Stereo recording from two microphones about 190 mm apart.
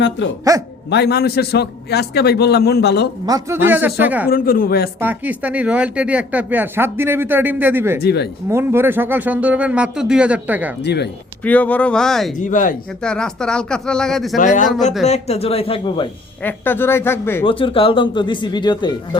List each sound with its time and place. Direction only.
0.5 s speech: 15° right (ahead or behind)
0.9 s a man's voice: 60° left (ahead or behind)
3.2 s speech: 15° right (ahead or behind)
4.3 s speech: 50° left (ahead or behind)
4.9 s speech: 10° right (ahead or behind)
8.0 s a man's voice: 60° left (ahead or behind)
8.4 s speech: 15° right (ahead or behind)
10.8 s a man's voice: 60° left (ahead or behind)
11.4 s speech: 10° left (ahead or behind)
12.4 s speech: 45° left (ahead or behind)
13.0 s speech: 5° left (ahead or behind)
14.3 s speech: 45° left (ahead or behind)
16.4 s speech: 10° left (ahead or behind)
17.4 s speech: 25° left (ahead or behind)